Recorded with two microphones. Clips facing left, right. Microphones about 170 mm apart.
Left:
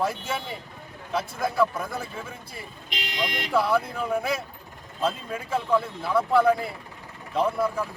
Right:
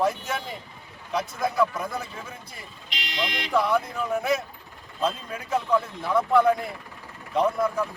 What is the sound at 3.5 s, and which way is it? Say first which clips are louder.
Speech: even; 5° left (ahead or behind).